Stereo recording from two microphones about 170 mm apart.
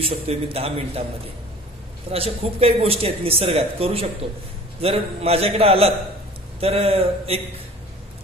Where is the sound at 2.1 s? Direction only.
35° right (ahead or behind).